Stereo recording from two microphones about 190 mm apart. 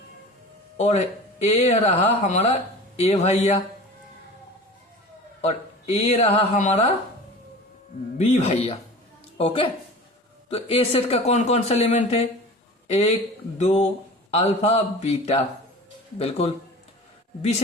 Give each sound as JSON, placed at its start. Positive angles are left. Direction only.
{"t": 0.8, "sound": "a man's voice", "side_deg": 35}
{"t": 5.4, "sound": "speech", "side_deg": 35}
{"t": 8.2, "sound": "a man's voice", "side_deg": 35}